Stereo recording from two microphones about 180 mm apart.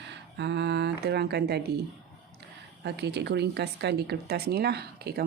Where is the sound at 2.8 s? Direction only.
65° right (ahead or behind).